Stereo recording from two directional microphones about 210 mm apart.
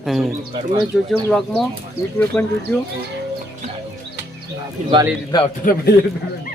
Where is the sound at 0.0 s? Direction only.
Centre (ahead or behind).